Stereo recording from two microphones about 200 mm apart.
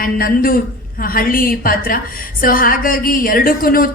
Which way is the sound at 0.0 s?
45° left (ahead or behind).